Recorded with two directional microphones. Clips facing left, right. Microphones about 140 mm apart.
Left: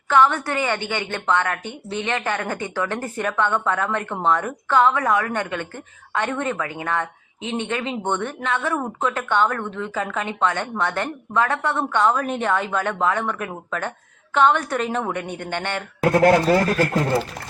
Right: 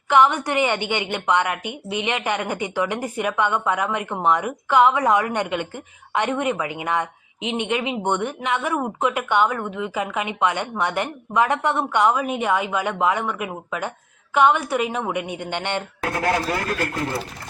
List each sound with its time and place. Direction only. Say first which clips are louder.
0.1 s a woman's voice: right 1 dB; 15° right (ahead or behind)